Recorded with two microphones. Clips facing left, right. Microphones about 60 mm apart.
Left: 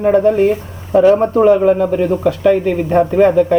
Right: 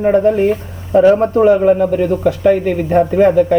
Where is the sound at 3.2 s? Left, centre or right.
Centre.